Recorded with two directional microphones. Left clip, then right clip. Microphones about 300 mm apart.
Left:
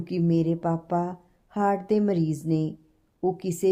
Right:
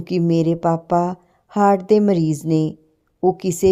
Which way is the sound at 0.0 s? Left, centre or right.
Right.